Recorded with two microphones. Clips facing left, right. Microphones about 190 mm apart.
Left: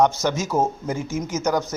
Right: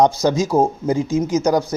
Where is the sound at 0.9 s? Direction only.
15° right (ahead or behind).